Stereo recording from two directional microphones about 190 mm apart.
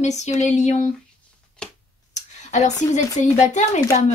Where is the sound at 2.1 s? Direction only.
40° left (ahead or behind).